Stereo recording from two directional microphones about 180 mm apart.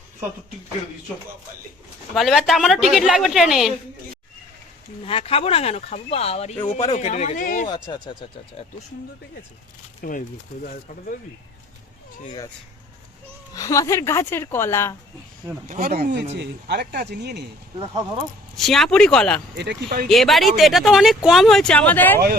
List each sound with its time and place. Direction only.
2.1 s speech: centre (ahead or behind)
5.0 s speech: 30° left (ahead or behind)
7.7 s speech: 25° left (ahead or behind)
8.6 s speech: 35° left (ahead or behind)
10.0 s speech: 50° left (ahead or behind)
13.5 s speech: 20° left (ahead or behind)
15.6 s speech: 45° right (ahead or behind)
16.4 s speech: 70° right (ahead or behind)
18.5 s speech: centre (ahead or behind)
19.5 s speech: 65° right (ahead or behind)
20.1 s speech: centre (ahead or behind)